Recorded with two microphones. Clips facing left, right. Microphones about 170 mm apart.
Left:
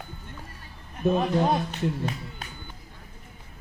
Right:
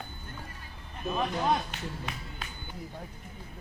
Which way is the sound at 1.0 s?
70° left (ahead or behind).